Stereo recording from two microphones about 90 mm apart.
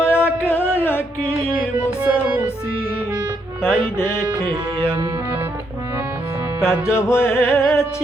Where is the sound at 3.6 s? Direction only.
25° left (ahead or behind).